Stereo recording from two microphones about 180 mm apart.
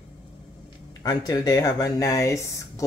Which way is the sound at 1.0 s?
20° left (ahead or behind).